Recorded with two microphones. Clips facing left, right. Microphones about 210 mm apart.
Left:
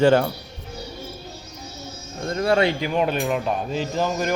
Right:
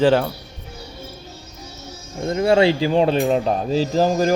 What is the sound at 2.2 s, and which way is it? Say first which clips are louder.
Speech: right 4 dB; 20° right (ahead or behind).